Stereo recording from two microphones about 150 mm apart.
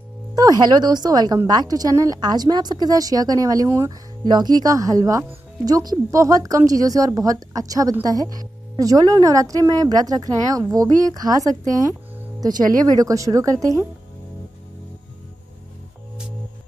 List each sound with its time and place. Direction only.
0.3 s speech: 25° right (ahead or behind)